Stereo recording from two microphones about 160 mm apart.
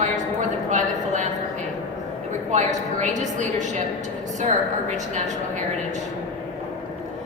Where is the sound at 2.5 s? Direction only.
50° right (ahead or behind).